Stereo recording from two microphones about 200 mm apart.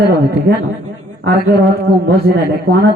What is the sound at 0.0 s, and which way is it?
A man's voice, 55° right (ahead or behind).